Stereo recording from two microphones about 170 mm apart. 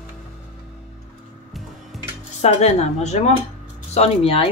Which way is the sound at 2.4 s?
40° left (ahead or behind).